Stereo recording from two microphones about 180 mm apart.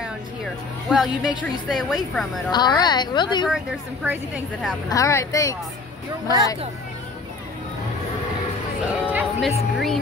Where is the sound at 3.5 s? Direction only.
5° right (ahead or behind).